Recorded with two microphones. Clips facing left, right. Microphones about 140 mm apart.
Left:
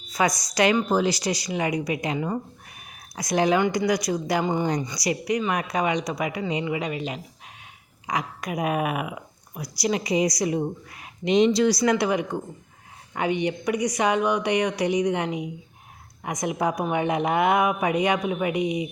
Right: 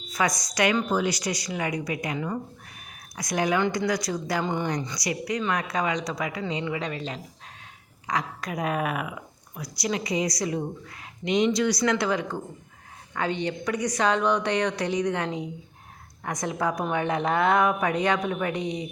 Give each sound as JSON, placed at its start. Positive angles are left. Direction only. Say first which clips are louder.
{"t": 0.2, "sound": "a woman's voice", "louder": "left 3 dB", "side_deg": 25}
{"t": 9.6, "sound": "a woman's voice", "louder": "left 3 dB", "side_deg": 25}
{"t": 11.9, "sound": "a woman's voice", "louder": "left 3 dB", "side_deg": 15}